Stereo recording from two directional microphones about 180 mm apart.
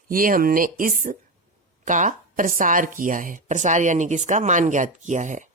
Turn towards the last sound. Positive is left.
turn(degrees=-40)  # may be behind; listen again after turning